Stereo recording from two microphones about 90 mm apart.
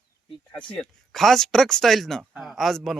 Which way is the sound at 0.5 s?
15° left (ahead or behind).